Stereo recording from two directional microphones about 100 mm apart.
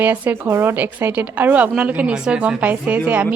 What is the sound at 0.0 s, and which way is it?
A woman's voice, 20° right (ahead or behind).